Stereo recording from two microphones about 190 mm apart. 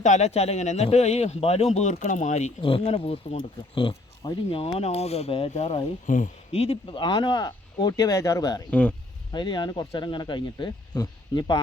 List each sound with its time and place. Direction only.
0.0 s speech: 35° left (ahead or behind); by 9.0 s 10° left (ahead or behind)
9.3 s speech: 20° left (ahead or behind)